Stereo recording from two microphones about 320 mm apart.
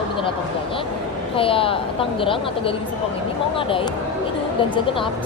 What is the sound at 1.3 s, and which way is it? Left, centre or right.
Speech, centre.